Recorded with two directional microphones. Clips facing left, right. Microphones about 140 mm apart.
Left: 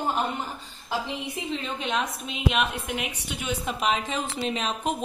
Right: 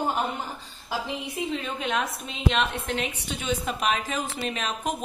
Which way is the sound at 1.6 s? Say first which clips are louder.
Even; 5° right (ahead or behind).